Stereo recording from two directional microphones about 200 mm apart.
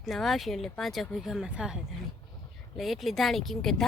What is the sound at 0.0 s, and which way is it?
Speech, centre (ahead or behind).